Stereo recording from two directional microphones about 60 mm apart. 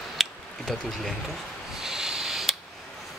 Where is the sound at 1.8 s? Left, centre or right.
Centre.